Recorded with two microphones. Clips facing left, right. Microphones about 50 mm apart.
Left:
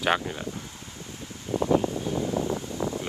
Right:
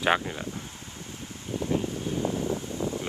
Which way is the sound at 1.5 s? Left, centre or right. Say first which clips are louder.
Left 5 dB; left.